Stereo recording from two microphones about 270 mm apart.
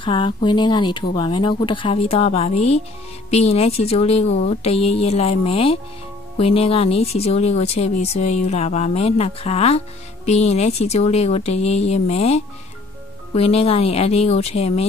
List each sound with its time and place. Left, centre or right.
0.0 s speech: centre